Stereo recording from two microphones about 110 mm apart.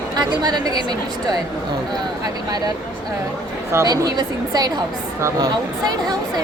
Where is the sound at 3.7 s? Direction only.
30° right (ahead or behind).